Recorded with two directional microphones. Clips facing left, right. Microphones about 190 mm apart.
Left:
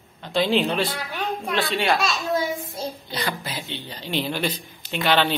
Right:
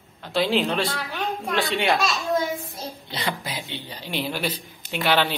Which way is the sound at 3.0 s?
25° right (ahead or behind).